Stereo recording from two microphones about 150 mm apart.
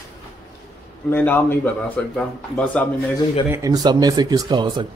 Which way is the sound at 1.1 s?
15° left (ahead or behind).